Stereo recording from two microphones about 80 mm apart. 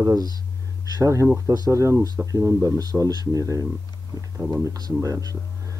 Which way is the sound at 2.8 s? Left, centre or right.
Right.